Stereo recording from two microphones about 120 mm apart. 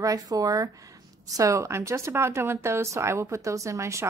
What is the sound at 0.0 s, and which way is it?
Speech, 30° right (ahead or behind).